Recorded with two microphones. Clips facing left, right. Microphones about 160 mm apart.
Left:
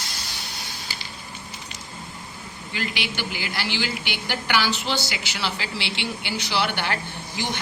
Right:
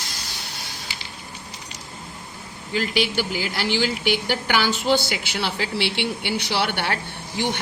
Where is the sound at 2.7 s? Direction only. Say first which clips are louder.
Right 7 dB; 40° right (ahead or behind).